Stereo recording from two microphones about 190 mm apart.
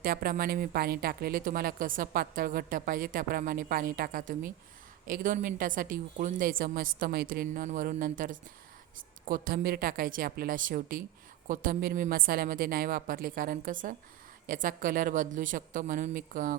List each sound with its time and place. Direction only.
0.0 s speech: 50° right (ahead or behind)